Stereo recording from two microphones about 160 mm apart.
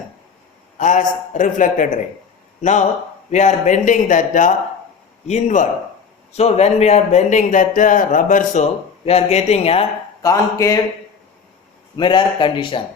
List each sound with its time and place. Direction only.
0.8 s speech: 55° left (ahead or behind)
9.0 s a man's voice: 40° left (ahead or behind)
10.2 s speech: 20° left (ahead or behind)
11.9 s a man's voice: 30° left (ahead or behind)